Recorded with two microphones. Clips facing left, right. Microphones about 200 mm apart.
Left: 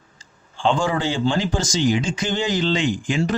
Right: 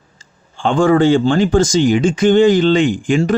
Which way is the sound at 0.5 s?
55° right (ahead or behind).